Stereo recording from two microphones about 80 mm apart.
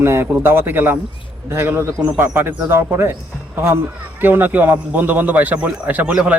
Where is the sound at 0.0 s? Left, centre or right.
Right.